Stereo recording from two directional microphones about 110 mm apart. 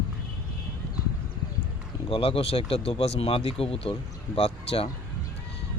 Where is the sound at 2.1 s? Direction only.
60° left (ahead or behind).